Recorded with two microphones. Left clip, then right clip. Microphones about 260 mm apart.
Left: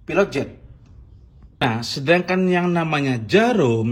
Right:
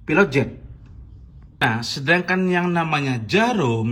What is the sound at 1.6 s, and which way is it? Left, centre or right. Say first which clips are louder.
Speech: right 1 dB; centre.